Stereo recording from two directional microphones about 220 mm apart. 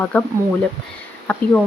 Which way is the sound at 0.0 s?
5° left (ahead or behind).